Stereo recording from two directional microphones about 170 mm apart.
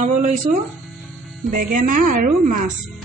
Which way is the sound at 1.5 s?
55° right (ahead or behind).